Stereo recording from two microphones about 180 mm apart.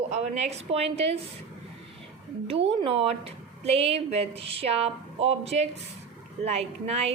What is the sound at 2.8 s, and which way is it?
A woman's voice, 35° right (ahead or behind).